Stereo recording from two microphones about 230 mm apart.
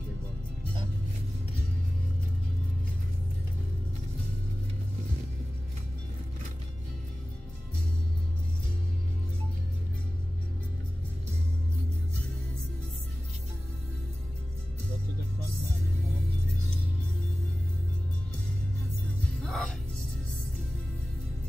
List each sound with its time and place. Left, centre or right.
19.4 s music: centre